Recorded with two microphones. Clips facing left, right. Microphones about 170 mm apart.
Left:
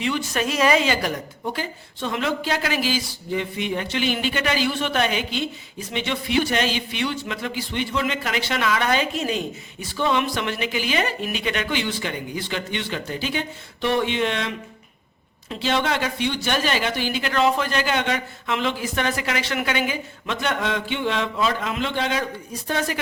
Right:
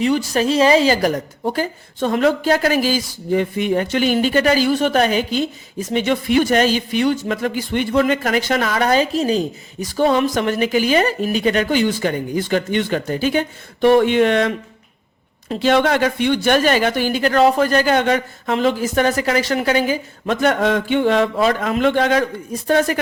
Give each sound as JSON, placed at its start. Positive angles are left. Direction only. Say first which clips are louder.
{"t": 0.0, "sound": "a woman's voice", "louder": "right 7 dB", "side_deg": -40}